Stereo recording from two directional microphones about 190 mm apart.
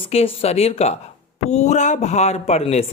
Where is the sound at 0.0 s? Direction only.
30° left (ahead or behind).